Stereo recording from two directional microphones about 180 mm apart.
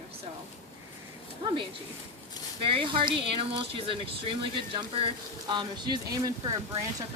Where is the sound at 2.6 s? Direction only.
30° right (ahead or behind).